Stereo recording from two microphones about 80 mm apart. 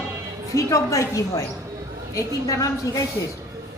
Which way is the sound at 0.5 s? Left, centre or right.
Left.